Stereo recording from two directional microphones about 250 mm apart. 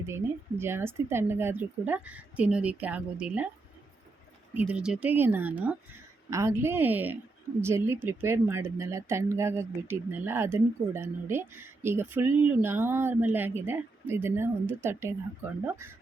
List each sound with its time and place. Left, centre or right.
0.6 s a woman's voice: centre
4.5 s speech: centre